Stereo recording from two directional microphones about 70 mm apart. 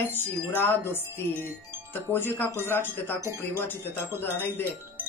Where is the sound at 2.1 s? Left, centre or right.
Left.